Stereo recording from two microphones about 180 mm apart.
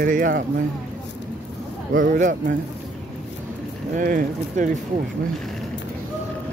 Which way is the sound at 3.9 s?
50° right (ahead or behind).